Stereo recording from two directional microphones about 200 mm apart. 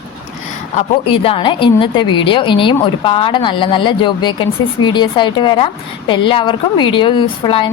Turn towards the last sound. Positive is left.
turn(degrees=25)  # may be behind; listen again after turning